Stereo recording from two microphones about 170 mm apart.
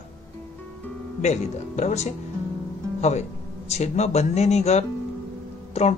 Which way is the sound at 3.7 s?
40° left (ahead or behind).